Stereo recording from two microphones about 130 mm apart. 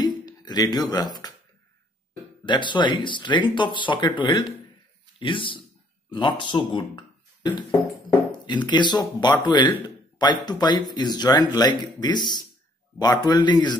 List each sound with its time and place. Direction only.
0.0 s a sound: 35° left (ahead or behind)
2.4 s speech: 35° left (ahead or behind)
8.6 s speech: 35° left (ahead or behind)